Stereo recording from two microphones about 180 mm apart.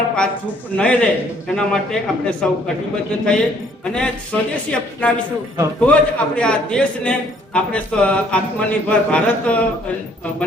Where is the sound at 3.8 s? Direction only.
5° left (ahead or behind).